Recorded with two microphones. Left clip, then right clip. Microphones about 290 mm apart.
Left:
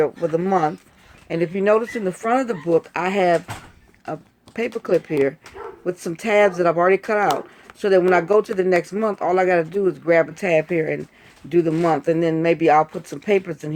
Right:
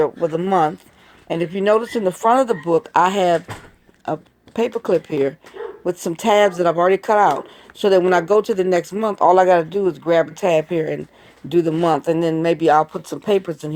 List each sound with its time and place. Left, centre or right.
0.0 s speech: centre